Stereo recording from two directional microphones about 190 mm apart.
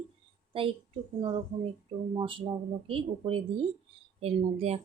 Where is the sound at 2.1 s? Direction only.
25° right (ahead or behind).